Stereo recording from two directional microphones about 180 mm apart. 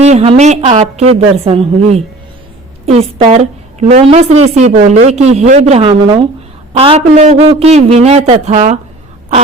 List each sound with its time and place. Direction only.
0.0 s a man's voice: 35° right (ahead or behind)
5.9 s speech: 20° right (ahead or behind)
6.7 s a man's voice: 35° right (ahead or behind)